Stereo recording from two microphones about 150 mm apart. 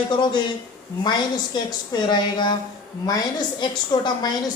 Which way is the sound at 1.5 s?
30° left (ahead or behind).